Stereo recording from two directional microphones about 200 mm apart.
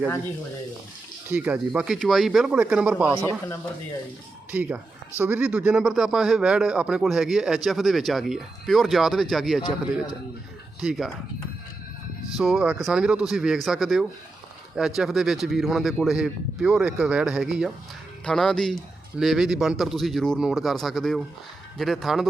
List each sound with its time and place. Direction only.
1.3 s speech: 10° right (ahead or behind)
3.1 s speech: 15° left (ahead or behind)
4.5 s speech: 10° right (ahead or behind)
10.8 s speech: 5° right (ahead or behind)
12.4 s speech: 5° right (ahead or behind)